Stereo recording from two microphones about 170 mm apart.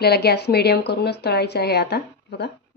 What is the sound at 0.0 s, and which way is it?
Speech, 70° left (ahead or behind).